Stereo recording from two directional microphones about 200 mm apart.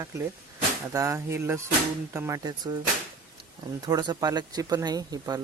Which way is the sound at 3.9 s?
20° right (ahead or behind).